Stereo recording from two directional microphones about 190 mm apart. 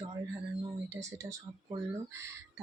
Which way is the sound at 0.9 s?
15° right (ahead or behind).